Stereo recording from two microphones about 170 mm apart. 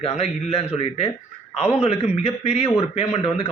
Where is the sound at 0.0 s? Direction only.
35° left (ahead or behind).